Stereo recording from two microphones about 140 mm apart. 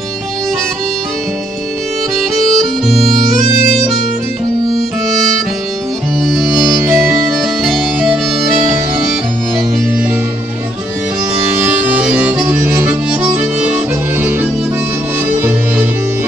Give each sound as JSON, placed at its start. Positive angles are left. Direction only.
{"t": 2.3, "sound": "harmonica", "side_deg": 0}
{"t": 5.1, "sound": "harmonica", "side_deg": 0}
{"t": 7.3, "sound": "music", "side_deg": 0}
{"t": 11.4, "sound": "music", "side_deg": -10}